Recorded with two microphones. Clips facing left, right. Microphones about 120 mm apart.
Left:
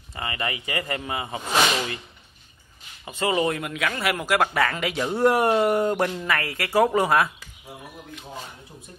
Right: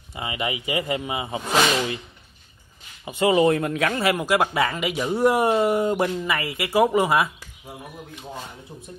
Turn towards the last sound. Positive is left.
turn(degrees=-10)  # may be behind; listen again after turning